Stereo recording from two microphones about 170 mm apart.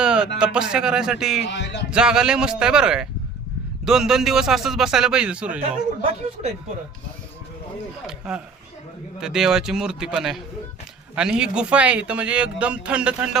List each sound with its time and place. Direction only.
0.0 s a sound: 5° right (ahead or behind)
0.3 s speech: 5° right (ahead or behind)
1.5 s music: 90° left
1.9 s speech: 5° right (ahead or behind)
8.0 s speech: 5° right (ahead or behind)